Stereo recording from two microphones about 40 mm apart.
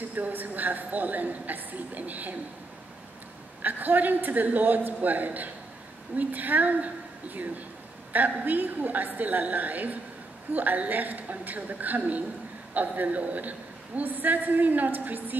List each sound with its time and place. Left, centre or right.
0.1 s a man's voice: right
3.6 s a man's voice: right